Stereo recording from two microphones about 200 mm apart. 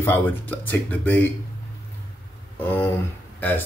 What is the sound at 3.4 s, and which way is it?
Speech, 10° left (ahead or behind).